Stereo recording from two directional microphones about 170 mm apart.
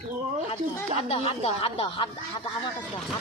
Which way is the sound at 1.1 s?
35° left (ahead or behind).